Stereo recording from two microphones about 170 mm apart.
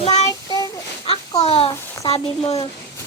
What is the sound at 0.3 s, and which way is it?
Child singing, 20° left (ahead or behind).